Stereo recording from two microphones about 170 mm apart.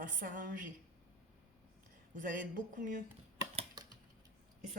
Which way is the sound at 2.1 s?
50° right (ahead or behind).